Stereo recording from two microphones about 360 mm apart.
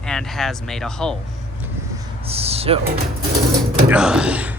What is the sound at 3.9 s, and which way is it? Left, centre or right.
Speech, centre.